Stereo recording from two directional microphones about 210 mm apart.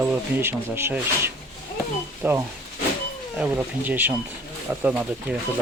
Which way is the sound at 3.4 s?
10° right (ahead or behind).